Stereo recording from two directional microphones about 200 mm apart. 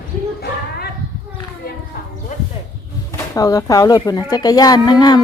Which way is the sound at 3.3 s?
15° left (ahead or behind).